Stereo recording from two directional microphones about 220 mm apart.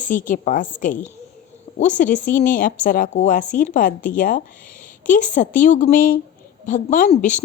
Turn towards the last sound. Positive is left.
turn(degrees=35)  # may be behind; listen again after turning